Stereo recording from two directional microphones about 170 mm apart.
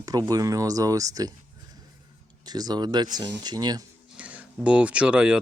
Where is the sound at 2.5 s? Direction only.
25° right (ahead or behind).